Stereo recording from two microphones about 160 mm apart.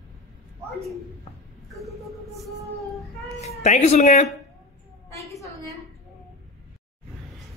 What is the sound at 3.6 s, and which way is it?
Speech, 45° left (ahead or behind).